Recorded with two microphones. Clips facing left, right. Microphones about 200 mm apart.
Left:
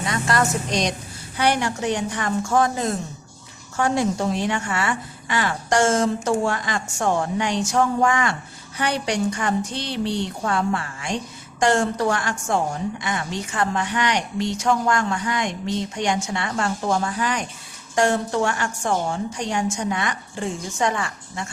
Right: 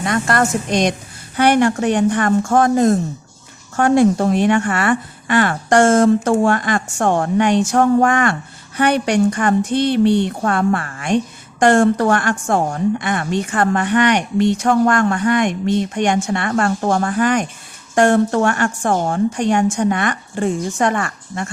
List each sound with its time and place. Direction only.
0.0 s a woman's voice: 55° right (ahead or behind)